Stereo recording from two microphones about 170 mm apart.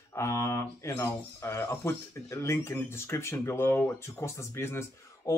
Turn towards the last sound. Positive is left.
turn(degrees=15)  # may be behind; listen again after turning